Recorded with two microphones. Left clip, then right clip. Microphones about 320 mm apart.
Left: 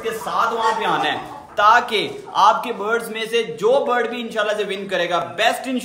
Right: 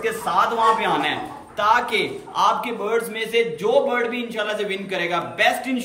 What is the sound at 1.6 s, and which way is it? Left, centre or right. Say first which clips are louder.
A man's voice: left 4 dB; centre.